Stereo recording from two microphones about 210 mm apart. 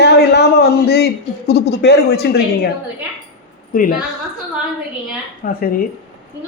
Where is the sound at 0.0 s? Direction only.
50° left (ahead or behind).